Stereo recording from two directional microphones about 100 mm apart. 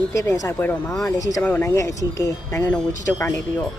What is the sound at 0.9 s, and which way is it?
Speech, 35° left (ahead or behind).